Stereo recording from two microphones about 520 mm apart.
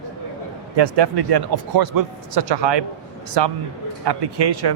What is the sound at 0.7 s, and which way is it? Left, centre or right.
Speech, right.